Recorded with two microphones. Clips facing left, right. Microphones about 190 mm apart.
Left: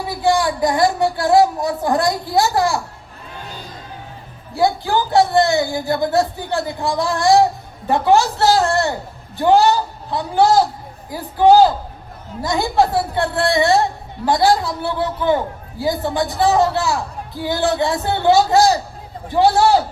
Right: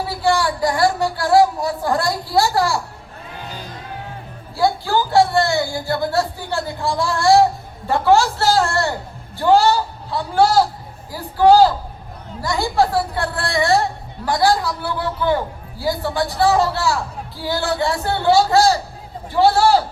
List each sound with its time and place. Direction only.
0.2 s a man's voice: 20° left (ahead or behind)
4.5 s a man's voice: 20° left (ahead or behind)